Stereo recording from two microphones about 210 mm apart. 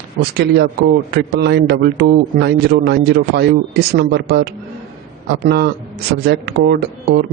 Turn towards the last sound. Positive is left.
turn(degrees=-50)  # may be behind; listen again after turning